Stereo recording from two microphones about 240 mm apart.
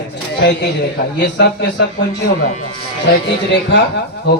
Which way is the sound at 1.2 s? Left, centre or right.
Left.